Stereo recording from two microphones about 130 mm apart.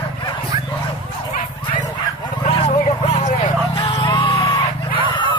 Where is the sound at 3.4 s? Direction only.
40° left (ahead or behind).